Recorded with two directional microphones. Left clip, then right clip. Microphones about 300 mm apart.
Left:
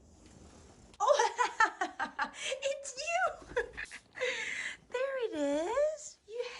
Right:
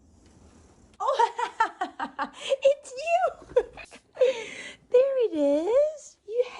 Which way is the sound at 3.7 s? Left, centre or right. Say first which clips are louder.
Left 1 dB; right.